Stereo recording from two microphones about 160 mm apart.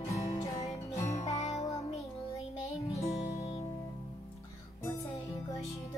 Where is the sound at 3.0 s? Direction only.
45° left (ahead or behind).